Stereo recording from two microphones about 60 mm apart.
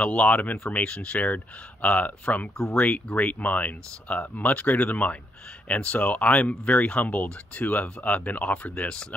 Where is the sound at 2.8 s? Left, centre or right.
Left.